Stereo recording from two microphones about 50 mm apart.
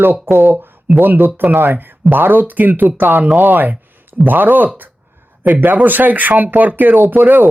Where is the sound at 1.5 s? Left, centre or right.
Right.